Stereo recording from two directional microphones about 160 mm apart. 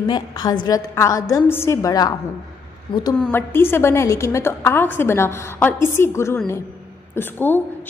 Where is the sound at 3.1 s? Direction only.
10° left (ahead or behind).